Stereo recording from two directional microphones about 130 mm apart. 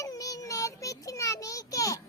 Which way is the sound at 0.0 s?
30° left (ahead or behind).